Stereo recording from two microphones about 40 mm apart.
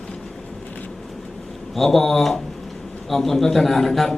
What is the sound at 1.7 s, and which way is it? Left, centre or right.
A man's voice, centre.